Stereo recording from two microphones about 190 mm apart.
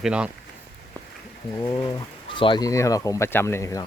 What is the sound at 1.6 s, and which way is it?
Speech, 20° left (ahead or behind).